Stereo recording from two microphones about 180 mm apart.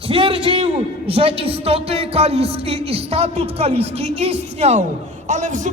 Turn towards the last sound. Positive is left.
turn(degrees=-40)  # may be behind; listen again after turning